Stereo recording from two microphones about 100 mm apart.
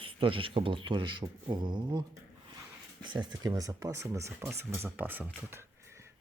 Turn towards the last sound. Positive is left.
turn(degrees=-25)  # may be behind; listen again after turning